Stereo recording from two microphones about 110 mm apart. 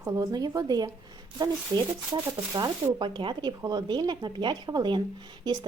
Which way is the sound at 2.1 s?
40° right (ahead or behind).